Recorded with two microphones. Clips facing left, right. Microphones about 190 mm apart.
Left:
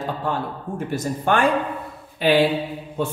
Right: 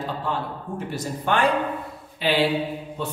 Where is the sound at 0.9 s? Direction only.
45° left (ahead or behind).